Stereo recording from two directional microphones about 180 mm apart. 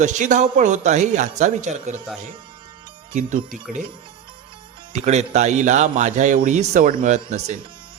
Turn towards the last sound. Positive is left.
turn(degrees=-40)  # may be behind; listen again after turning